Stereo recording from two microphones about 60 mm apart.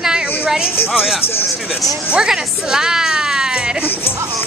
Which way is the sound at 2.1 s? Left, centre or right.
Centre.